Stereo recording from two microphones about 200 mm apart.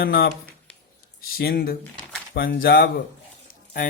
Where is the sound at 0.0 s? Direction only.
50° left (ahead or behind).